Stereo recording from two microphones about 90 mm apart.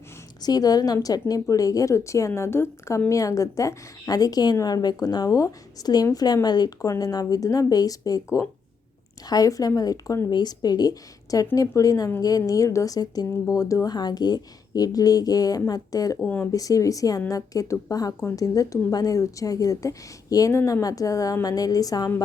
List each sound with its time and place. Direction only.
0.4 s a woman's voice: 45° left (ahead or behind)
16.2 s speech: 20° left (ahead or behind)
16.5 s a woman's voice: 40° left (ahead or behind)